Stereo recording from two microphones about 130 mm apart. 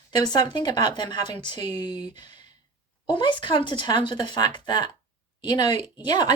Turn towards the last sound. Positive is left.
turn(degrees=35)  # may be behind; listen again after turning